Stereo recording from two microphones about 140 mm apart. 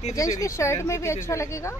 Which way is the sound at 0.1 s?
25° left (ahead or behind).